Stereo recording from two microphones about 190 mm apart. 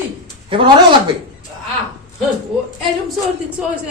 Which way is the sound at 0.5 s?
25° right (ahead or behind).